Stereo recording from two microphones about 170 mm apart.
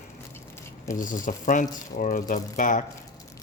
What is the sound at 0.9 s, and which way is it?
Speech, 50° left (ahead or behind).